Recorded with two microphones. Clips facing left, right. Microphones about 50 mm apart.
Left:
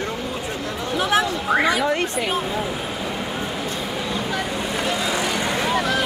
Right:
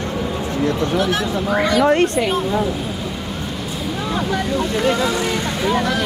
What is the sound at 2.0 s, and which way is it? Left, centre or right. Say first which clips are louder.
Speech: right 5 dB; centre.